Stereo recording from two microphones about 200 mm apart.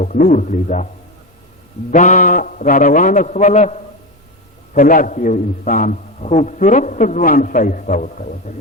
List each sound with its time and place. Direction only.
0.0 s a man's voice: 40° left (ahead or behind)
1.9 s a man's voice: 40° left (ahead or behind)